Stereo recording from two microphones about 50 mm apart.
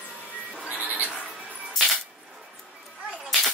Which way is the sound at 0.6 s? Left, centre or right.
Right.